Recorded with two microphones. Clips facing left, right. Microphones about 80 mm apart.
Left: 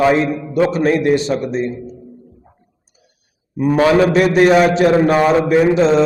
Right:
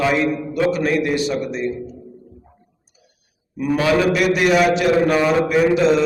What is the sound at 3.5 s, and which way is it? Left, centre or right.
A man's voice, left.